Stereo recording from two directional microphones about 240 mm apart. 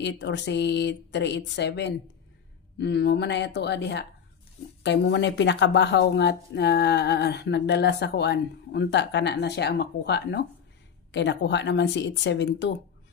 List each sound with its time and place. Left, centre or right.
0.0 s speech: left